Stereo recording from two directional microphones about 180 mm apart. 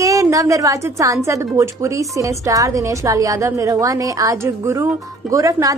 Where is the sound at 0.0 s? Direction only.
20° right (ahead or behind).